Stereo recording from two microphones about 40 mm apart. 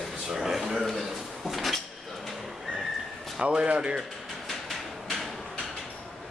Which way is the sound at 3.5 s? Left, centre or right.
Right.